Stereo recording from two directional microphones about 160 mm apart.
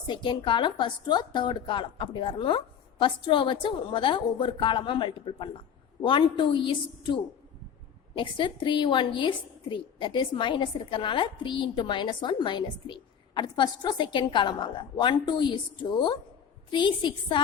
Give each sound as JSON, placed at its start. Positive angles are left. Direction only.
{"t": 0.1, "sound": "a woman's voice", "side_deg": 30}